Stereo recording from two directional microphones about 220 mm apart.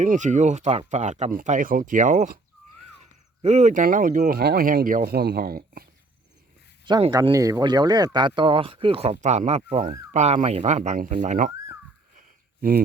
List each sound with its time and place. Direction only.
0.0 s speech: 35° right (ahead or behind)
6.8 s speech: 20° right (ahead or behind)